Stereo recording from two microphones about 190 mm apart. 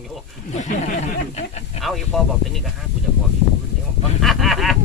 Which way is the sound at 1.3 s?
35° left (ahead or behind).